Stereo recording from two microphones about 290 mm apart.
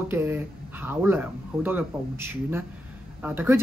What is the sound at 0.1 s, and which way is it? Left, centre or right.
Speech, centre.